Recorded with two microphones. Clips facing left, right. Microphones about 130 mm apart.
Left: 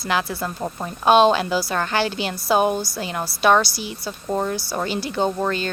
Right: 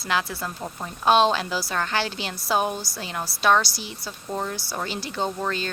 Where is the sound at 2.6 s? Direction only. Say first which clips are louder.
Left 6 dB; 60° left (ahead or behind).